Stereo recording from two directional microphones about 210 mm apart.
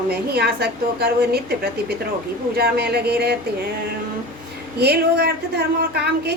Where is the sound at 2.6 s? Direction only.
50° right (ahead or behind).